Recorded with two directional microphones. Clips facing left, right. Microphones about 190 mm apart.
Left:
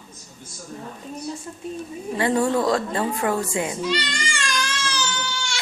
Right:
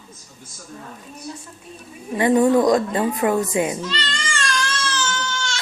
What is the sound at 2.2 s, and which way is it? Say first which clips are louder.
A woman's voice: right 5 dB; 20° right (ahead or behind).